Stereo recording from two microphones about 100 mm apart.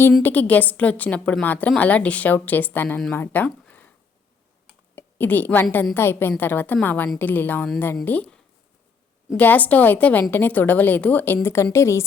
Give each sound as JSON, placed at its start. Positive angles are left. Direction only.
{"t": 0.2, "sound": "a woman's voice", "side_deg": 20}
{"t": 3.2, "sound": "a sound", "side_deg": 20}
{"t": 4.9, "sound": "a woman's voice", "side_deg": 20}
{"t": 9.4, "sound": "a woman's voice", "side_deg": 15}